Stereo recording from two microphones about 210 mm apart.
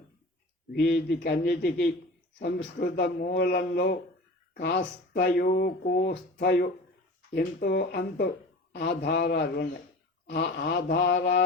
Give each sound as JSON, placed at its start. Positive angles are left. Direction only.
{"t": 0.7, "sound": "speech", "side_deg": 55}
{"t": 4.5, "sound": "speech", "side_deg": 55}
{"t": 4.8, "sound": "speech", "side_deg": 45}